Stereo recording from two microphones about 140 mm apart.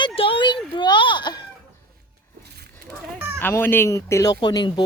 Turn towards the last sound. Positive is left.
turn(degrees=30)  # may be behind; listen again after turning